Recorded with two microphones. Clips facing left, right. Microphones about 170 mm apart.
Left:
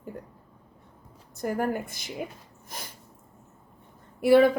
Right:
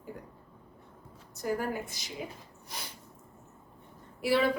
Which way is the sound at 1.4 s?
55° left (ahead or behind).